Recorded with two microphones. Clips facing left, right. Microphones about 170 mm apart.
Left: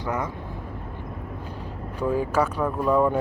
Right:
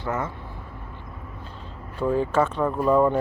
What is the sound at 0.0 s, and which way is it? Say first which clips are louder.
Speech: even; 15° left (ahead or behind).